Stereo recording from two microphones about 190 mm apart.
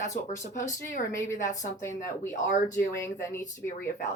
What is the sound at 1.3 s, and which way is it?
Speech, 40° left (ahead or behind).